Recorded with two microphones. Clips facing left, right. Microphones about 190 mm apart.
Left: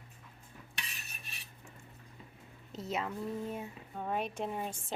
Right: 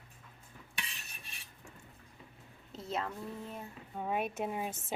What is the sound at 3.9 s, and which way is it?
Speech, 5° right (ahead or behind).